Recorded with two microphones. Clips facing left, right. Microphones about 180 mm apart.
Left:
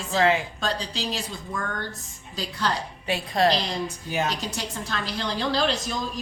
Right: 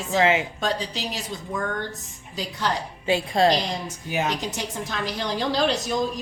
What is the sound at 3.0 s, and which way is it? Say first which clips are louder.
A woman's voice: right 3 dB; 25° right (ahead or behind).